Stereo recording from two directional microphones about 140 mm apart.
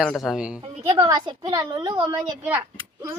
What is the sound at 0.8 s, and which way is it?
A woman's voice, 30° right (ahead or behind).